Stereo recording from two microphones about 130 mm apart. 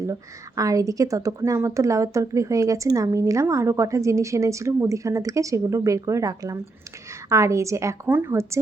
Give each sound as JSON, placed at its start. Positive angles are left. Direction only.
{"t": 0.0, "sound": "speech", "side_deg": -25}